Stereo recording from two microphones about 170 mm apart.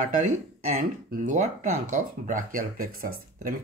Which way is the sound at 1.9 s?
50° right (ahead or behind).